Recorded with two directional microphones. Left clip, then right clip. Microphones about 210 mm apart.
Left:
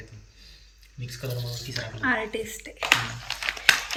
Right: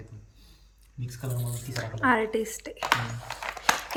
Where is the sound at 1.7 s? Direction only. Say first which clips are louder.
Right 2 dB; 20° right (ahead or behind).